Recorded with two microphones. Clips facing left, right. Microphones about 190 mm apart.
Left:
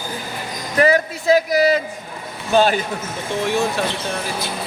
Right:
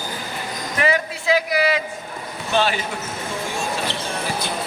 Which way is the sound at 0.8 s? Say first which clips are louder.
Left 6 dB; 40° left (ahead or behind).